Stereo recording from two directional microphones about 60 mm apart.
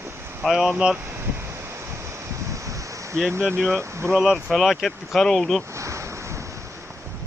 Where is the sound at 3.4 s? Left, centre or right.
Left.